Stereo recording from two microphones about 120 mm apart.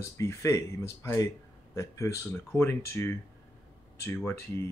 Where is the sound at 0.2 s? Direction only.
25° left (ahead or behind).